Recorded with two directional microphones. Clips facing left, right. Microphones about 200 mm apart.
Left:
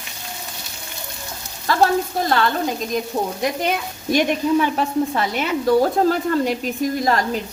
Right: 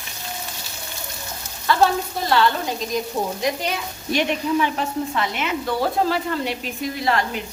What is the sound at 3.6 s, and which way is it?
A woman's voice, 50° left (ahead or behind).